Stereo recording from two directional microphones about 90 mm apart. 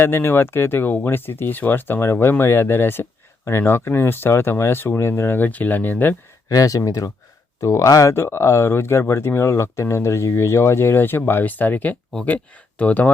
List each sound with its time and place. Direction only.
0.0 s speech: 25° left (ahead or behind)
6.5 s speech: 40° left (ahead or behind); by 13.1 s 20° left (ahead or behind)